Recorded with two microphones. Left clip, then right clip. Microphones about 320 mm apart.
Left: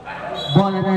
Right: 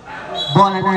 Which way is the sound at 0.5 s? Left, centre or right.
Right.